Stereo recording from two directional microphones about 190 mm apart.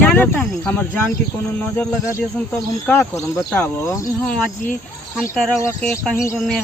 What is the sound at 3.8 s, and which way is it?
Speech, 15° left (ahead or behind).